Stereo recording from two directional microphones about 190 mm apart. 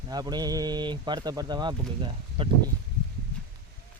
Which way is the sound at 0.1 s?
20° right (ahead or behind).